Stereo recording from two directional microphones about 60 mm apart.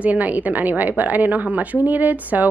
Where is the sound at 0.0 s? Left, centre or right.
Right.